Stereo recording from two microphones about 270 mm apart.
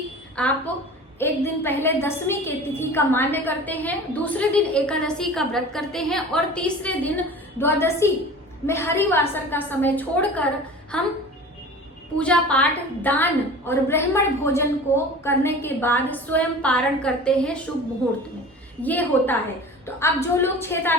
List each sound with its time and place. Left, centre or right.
0.3 s a woman's voice: centre
12.2 s a woman's voice: centre
18.8 s a woman's voice: centre